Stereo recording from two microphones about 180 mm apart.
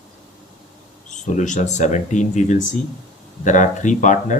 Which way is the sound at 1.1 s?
45° left (ahead or behind).